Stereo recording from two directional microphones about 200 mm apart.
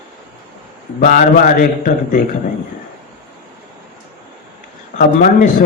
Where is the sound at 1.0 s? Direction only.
40° left (ahead or behind).